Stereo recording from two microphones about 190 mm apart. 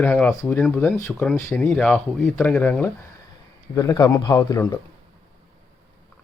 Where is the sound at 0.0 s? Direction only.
10° left (ahead or behind).